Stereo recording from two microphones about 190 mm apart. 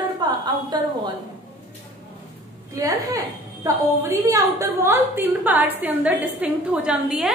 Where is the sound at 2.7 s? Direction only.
15° right (ahead or behind).